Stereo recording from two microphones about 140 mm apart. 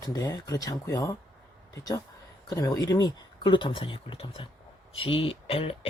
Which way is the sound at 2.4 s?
25° left (ahead or behind).